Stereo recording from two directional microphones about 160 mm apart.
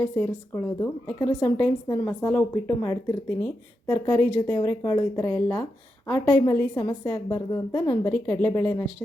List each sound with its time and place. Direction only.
0.0 s a woman's voice: 15° left (ahead or behind)